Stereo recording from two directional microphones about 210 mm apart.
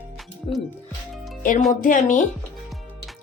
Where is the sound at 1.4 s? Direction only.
40° left (ahead or behind).